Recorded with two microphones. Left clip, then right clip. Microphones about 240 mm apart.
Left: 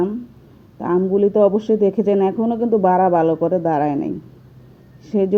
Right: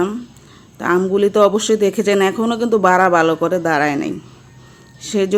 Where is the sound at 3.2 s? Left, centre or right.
Right.